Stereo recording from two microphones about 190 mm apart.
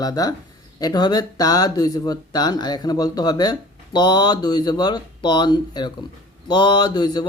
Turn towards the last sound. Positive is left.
turn(degrees=20)  # may be behind; listen again after turning